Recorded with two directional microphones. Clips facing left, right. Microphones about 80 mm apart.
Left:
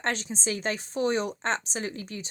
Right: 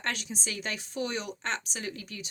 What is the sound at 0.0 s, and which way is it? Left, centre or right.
Speech, left.